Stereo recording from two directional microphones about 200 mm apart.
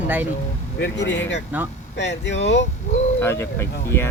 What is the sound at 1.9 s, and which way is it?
Speech, 60° left (ahead or behind).